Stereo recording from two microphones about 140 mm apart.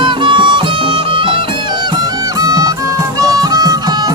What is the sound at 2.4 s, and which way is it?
Music, 25° right (ahead or behind).